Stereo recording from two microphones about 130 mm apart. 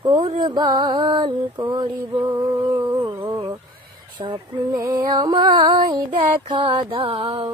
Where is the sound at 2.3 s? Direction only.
30° right (ahead or behind).